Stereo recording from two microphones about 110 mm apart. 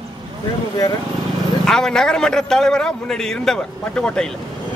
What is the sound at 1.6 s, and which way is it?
A man's voice, 5° left (ahead or behind).